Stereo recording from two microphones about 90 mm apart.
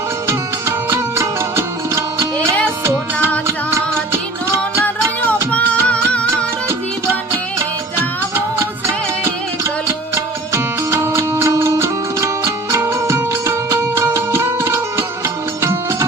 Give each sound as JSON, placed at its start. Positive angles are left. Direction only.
{"t": 0.9, "sound": "music", "side_deg": -30}
{"t": 3.4, "sound": "music", "side_deg": -30}
{"t": 5.5, "sound": "music", "side_deg": 15}
{"t": 6.3, "sound": "music", "side_deg": -25}
{"t": 10.2, "sound": "music", "side_deg": -30}